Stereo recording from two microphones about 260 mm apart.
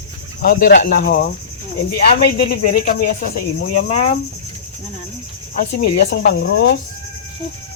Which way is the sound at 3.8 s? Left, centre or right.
Left.